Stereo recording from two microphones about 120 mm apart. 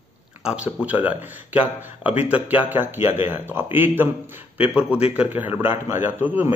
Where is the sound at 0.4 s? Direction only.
5° right (ahead or behind).